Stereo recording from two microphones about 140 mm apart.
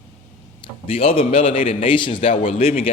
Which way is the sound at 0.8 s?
40° left (ahead or behind).